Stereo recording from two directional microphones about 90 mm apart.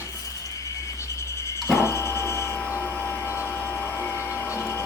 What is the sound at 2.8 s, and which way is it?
Vacuum cleaner, 10° left (ahead or behind).